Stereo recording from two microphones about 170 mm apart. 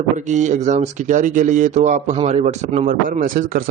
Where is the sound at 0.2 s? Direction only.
45° right (ahead or behind).